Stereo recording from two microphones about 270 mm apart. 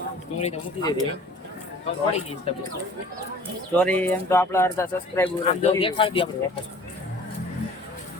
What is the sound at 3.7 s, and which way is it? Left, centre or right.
Speech, centre.